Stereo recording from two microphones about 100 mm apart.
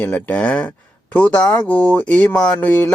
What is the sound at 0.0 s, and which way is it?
Speech, 15° left (ahead or behind).